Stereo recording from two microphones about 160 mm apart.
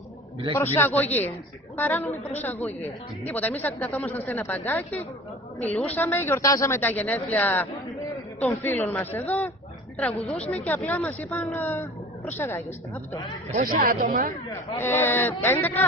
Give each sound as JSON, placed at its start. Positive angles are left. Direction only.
{"t": 0.6, "sound": "speech", "side_deg": 15}
{"t": 10.6, "sound": "speech", "side_deg": 10}
{"t": 13.5, "sound": "speech", "side_deg": -55}
{"t": 14.8, "sound": "speech", "side_deg": 15}